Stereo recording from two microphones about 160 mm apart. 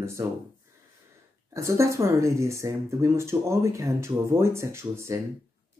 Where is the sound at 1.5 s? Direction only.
20° right (ahead or behind).